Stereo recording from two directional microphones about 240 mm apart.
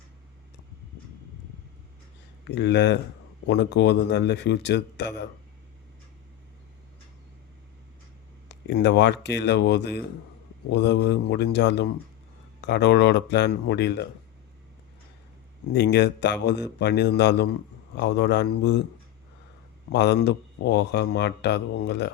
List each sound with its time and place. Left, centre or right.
2.6 s speech: left
8.4 s speech: left
15.7 s speech: left
19.9 s speech: left